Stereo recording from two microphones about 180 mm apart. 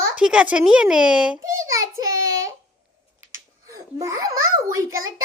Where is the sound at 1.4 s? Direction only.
15° right (ahead or behind).